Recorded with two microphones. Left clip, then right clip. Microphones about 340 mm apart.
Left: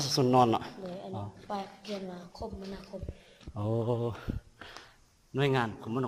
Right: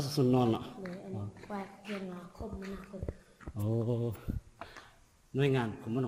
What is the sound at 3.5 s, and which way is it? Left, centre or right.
Speech, left.